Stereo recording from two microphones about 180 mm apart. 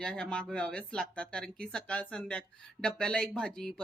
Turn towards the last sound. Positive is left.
turn(degrees=5)  # may be behind; listen again after turning